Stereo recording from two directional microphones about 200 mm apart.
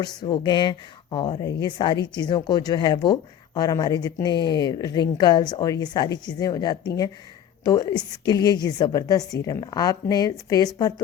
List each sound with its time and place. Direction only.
0.0 s speech: 20° left (ahead or behind)